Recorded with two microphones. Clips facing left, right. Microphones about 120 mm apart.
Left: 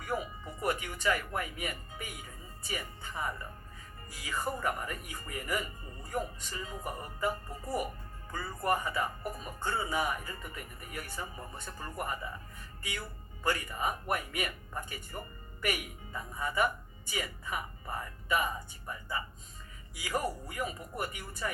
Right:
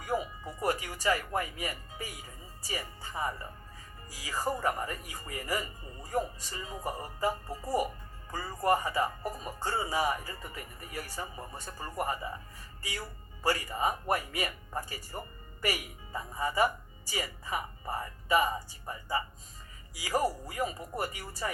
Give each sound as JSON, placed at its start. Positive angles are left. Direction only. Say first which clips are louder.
{"t": 0.6, "sound": "speech", "louder": "right 1 dB", "side_deg": -35}